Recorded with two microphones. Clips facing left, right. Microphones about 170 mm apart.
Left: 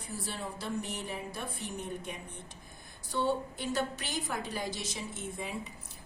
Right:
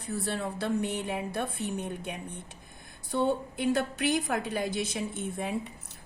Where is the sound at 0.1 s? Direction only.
60° right (ahead or behind).